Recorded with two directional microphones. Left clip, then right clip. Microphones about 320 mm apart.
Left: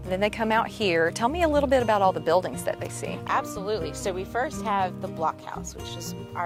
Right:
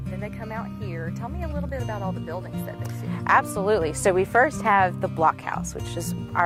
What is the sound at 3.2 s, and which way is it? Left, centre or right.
Speech, right.